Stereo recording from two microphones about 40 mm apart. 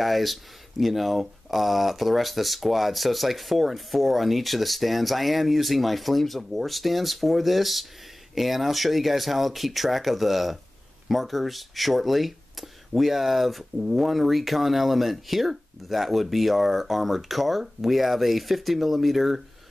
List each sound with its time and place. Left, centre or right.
0.0 s speech: centre